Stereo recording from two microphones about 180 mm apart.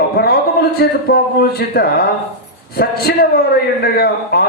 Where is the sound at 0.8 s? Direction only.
60° left (ahead or behind).